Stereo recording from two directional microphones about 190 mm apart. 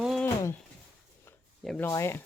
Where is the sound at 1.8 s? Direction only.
15° left (ahead or behind).